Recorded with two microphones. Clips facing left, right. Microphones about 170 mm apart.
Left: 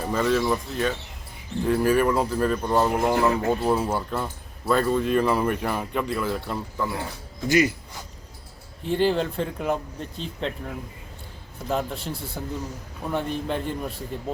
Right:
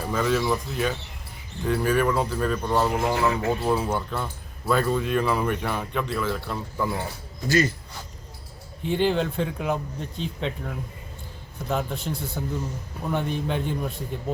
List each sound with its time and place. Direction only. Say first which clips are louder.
0.1 s speech: left 1 dB; centre (ahead or behind)
7.4 s speech: left 2 dB; 15° left (ahead or behind)
8.8 s speech: left 1 dB; centre (ahead or behind)